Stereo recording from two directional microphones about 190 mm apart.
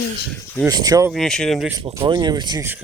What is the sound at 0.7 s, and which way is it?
Speech, 20° right (ahead or behind).